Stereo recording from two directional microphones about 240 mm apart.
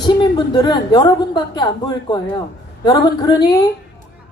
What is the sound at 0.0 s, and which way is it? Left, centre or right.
A woman's voice, centre.